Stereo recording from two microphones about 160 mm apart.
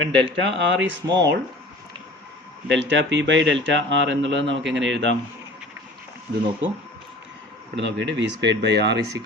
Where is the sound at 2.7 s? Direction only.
90° right.